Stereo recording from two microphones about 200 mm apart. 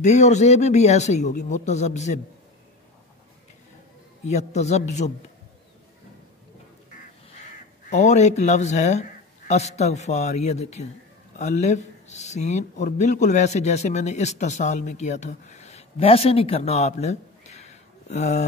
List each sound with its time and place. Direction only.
0.0 s speech: 35° left (ahead or behind)
4.3 s speech: 35° left (ahead or behind)
7.9 s speech: 35° left (ahead or behind)